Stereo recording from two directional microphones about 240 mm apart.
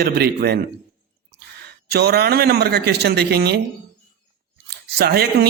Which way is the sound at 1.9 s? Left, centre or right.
Right.